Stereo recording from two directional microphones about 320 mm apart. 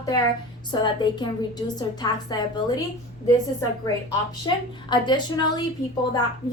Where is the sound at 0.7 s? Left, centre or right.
Centre.